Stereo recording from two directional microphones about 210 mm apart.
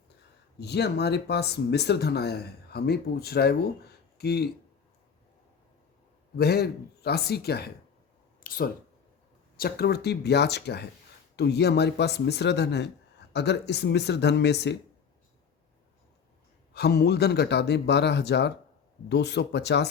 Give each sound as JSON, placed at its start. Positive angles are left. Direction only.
{"t": 0.6, "sound": "speech", "side_deg": 50}
{"t": 6.3, "sound": "speech", "side_deg": 50}
{"t": 16.7, "sound": "speech", "side_deg": 50}